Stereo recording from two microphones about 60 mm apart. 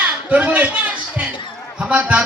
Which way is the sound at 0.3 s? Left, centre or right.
Right.